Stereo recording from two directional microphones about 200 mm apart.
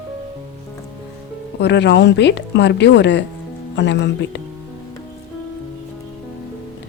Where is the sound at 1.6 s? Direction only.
60° left (ahead or behind).